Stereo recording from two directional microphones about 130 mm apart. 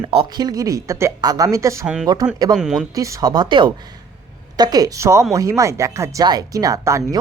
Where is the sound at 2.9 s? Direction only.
25° right (ahead or behind).